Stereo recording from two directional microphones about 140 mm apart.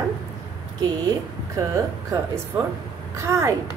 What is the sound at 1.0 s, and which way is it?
A woman's voice, 25° right (ahead or behind).